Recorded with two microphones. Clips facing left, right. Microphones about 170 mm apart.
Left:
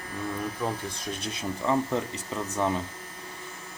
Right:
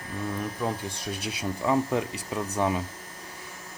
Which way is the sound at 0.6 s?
10° right (ahead or behind).